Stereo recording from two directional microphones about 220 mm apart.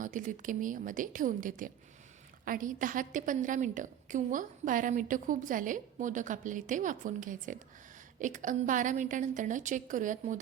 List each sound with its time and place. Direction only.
0.0 s a woman's voice: 35° right (ahead or behind)